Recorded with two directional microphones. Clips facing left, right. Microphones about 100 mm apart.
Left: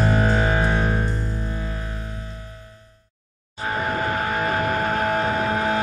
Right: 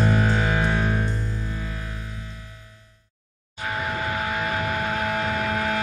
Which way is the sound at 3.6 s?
40° left (ahead or behind).